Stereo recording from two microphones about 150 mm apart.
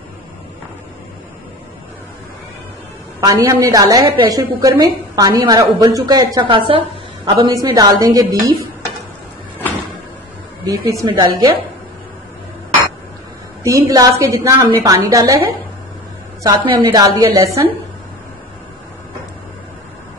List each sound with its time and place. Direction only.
3.2 s a woman's voice: 25° right (ahead or behind)
7.4 s a woman's voice: 25° right (ahead or behind)
10.6 s a woman's voice: 25° right (ahead or behind)
13.7 s a woman's voice: 25° right (ahead or behind)
16.4 s a woman's voice: 30° right (ahead or behind)